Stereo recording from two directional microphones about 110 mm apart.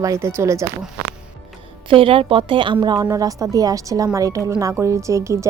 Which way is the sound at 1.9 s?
55° right (ahead or behind).